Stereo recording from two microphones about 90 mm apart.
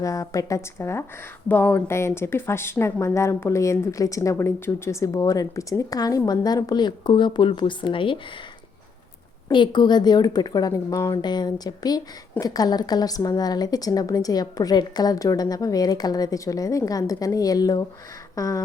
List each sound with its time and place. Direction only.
0.0 s speech: 40° left (ahead or behind)
1.5 s speech: 20° left (ahead or behind)
1.9 s speech: 30° left (ahead or behind); by 8.2 s 70° left (ahead or behind)
9.5 s a woman's voice: 60° left (ahead or behind); by 18.6 s 40° left (ahead or behind)